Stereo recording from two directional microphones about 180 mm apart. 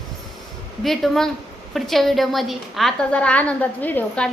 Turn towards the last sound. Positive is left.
turn(degrees=10)  # may be behind; listen again after turning